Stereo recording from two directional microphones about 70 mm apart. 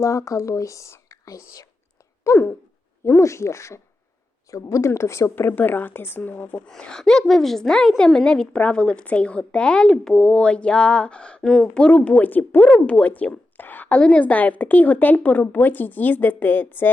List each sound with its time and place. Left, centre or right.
0.0 s speech: left
2.2 s a woman's voice: left
5.3 s a woman's voice: left
6.7 s a woman's voice: centre
11.9 s a woman's voice: left